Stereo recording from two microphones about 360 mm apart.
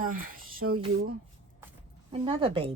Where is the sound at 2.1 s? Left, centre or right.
Centre.